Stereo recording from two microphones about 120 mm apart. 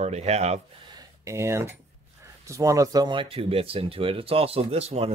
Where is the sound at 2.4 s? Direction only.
25° right (ahead or behind); by 5.1 s 55° right (ahead or behind).